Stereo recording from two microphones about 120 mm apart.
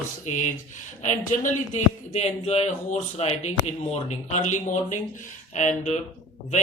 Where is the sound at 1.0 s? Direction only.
90° left.